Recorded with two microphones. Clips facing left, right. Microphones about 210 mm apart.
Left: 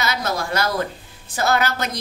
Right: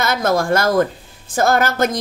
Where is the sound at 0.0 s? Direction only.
50° right (ahead or behind).